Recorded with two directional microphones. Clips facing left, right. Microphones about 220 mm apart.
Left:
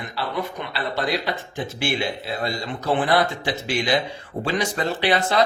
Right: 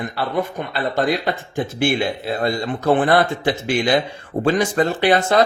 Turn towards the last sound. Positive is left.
turn(degrees=-50)  # may be behind; listen again after turning